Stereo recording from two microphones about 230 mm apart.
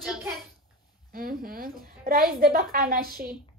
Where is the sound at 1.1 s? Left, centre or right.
Right.